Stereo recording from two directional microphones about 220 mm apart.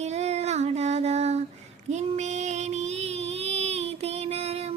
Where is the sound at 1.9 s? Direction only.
30° right (ahead or behind).